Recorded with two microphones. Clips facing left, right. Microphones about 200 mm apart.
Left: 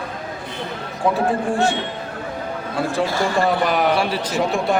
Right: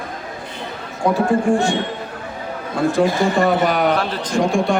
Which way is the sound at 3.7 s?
5° left (ahead or behind).